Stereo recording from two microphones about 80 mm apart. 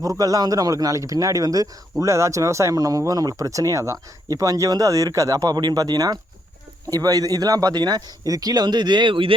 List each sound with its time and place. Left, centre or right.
0.0 s a man's voice: right